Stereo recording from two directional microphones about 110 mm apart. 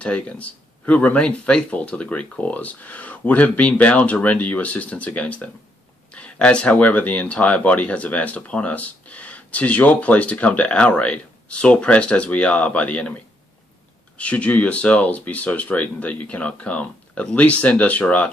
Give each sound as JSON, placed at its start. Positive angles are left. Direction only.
{"t": 0.0, "sound": "speech", "side_deg": 10}
{"t": 14.1, "sound": "speech", "side_deg": 10}